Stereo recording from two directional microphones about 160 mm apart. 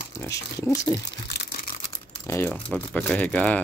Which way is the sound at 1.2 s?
90° left.